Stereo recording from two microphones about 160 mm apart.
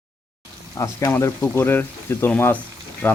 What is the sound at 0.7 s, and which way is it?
Speech, 20° left (ahead or behind).